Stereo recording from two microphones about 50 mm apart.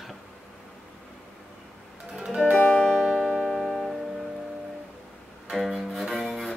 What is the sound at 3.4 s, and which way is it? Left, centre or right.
Music, centre.